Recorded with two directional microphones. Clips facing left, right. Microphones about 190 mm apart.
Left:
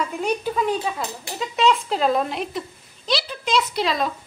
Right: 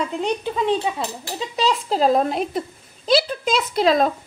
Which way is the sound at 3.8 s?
50° right (ahead or behind).